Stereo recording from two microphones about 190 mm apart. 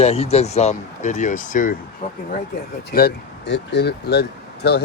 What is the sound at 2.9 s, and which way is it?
Speech, 60° left (ahead or behind).